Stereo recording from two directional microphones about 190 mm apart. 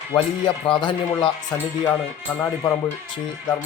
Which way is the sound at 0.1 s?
25° left (ahead or behind).